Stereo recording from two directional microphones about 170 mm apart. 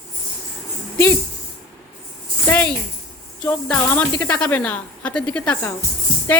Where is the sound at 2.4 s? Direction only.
10° left (ahead or behind).